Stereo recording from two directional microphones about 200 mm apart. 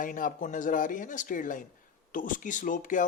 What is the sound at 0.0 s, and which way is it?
A man's voice, 40° left (ahead or behind).